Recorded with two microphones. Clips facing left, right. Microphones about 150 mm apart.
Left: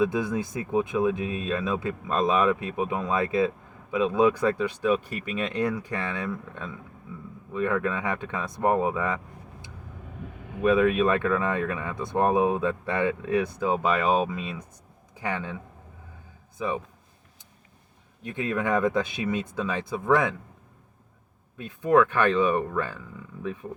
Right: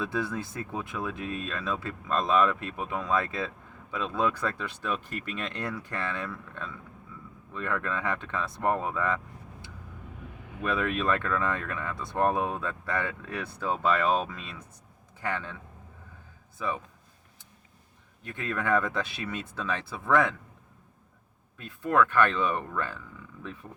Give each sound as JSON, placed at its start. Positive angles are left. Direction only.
{"t": 0.0, "sound": "speech", "side_deg": 15}
{"t": 18.3, "sound": "speech", "side_deg": 20}
{"t": 21.6, "sound": "speech", "side_deg": 15}